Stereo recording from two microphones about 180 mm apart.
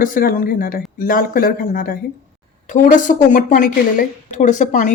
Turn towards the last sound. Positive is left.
turn(degrees=45)  # may be behind; listen again after turning